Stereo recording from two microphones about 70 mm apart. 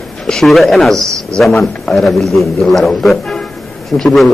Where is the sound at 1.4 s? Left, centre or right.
Centre.